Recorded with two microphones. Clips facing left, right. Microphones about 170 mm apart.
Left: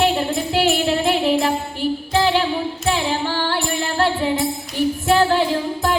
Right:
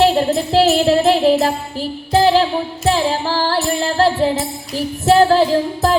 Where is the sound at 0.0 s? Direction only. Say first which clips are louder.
Right 5 dB; 35° right (ahead or behind).